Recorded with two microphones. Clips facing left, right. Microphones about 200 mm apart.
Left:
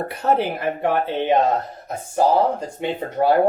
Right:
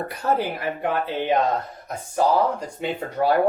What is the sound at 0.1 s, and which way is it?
Speech, 25° left (ahead or behind).